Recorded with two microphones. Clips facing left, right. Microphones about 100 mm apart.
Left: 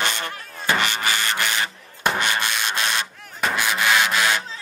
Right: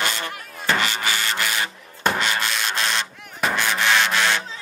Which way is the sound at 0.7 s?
20° left (ahead or behind).